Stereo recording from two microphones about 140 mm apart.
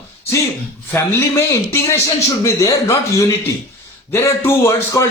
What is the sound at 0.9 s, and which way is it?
A man's voice, 15° left (ahead or behind).